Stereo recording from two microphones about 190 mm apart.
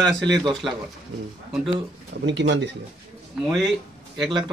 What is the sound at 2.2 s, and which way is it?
Speech, 70° right (ahead or behind).